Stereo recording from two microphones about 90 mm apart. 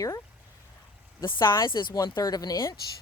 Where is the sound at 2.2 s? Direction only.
45° left (ahead or behind).